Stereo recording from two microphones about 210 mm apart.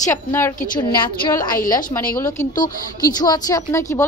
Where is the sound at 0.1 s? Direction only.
10° left (ahead or behind).